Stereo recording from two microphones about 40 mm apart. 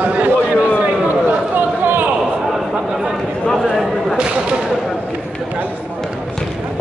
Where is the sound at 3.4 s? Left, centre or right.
Centre.